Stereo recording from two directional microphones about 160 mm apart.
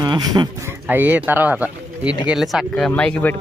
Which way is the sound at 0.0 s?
25° right (ahead or behind).